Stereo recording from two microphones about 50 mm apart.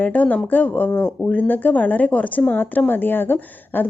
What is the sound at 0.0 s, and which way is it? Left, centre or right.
A woman's voice, left.